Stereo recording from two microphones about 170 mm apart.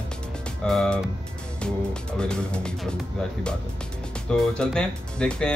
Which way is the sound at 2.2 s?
5° left (ahead or behind).